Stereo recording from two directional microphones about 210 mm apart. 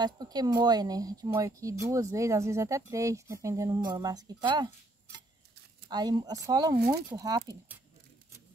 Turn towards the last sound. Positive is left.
turn(degrees=-15)  # may be behind; listen again after turning